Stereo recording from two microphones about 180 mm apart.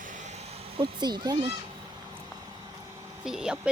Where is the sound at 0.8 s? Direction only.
25° right (ahead or behind).